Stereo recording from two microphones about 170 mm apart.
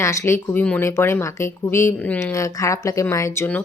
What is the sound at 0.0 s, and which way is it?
A woman's voice, 15° left (ahead or behind).